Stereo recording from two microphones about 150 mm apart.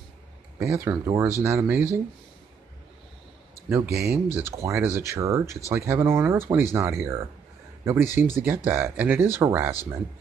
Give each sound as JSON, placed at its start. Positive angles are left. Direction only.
{"t": 0.7, "sound": "speech", "side_deg": -20}
{"t": 3.6, "sound": "speech", "side_deg": -15}